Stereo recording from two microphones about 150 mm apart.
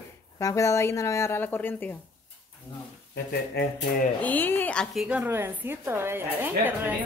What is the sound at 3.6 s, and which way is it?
Speech, 90° left.